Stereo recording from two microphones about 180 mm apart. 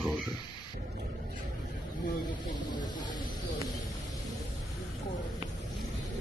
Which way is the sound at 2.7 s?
25° left (ahead or behind).